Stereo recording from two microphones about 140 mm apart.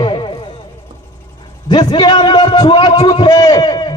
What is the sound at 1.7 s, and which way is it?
A man's voice, 30° left (ahead or behind).